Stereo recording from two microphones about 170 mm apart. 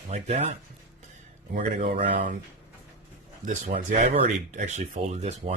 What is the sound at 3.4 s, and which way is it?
Speech, 50° right (ahead or behind).